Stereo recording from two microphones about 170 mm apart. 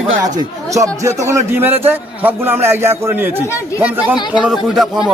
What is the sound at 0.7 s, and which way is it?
A man's voice, 20° right (ahead or behind).